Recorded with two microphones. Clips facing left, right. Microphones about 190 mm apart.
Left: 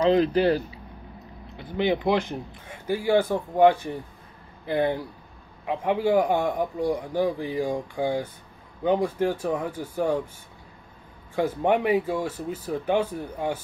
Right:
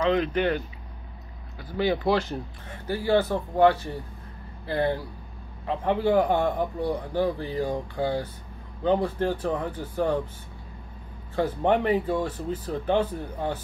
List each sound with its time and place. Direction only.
0.0 s speech: 35° left (ahead or behind)
1.6 s a man's voice: 20° left (ahead or behind)
11.3 s a man's voice: 10° left (ahead or behind)